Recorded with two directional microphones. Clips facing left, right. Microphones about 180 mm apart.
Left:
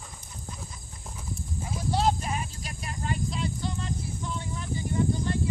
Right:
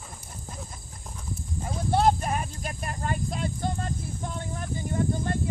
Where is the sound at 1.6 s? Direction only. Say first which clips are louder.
Right 4 dB; 55° right (ahead or behind).